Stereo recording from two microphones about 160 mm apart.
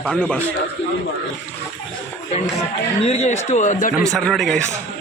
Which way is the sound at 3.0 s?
40° left (ahead or behind).